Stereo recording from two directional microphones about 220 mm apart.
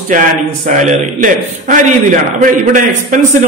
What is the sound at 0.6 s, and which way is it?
A man's voice, 35° right (ahead or behind).